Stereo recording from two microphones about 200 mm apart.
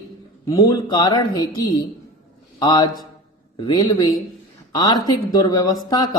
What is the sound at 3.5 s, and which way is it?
Speech, 20° left (ahead or behind).